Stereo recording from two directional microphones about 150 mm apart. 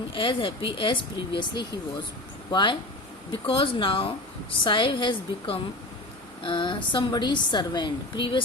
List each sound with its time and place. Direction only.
0.1 s a woman's voice: 35° left (ahead or behind)